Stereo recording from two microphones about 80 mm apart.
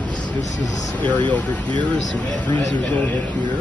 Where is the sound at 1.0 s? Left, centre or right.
Centre.